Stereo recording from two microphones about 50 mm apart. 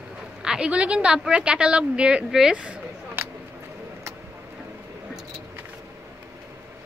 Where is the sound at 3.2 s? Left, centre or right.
Right.